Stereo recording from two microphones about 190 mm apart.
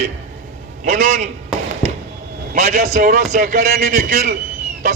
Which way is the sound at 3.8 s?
40° right (ahead or behind).